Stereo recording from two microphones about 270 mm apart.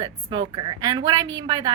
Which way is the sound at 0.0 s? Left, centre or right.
Centre.